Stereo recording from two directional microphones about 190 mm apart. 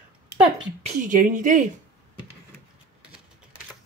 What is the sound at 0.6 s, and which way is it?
Speech, 35° right (ahead or behind).